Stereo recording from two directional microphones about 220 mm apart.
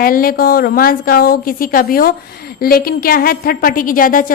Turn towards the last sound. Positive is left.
turn(degrees=40)  # may be behind; listen again after turning